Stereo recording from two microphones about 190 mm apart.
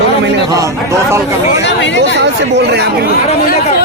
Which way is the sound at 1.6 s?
70° left (ahead or behind).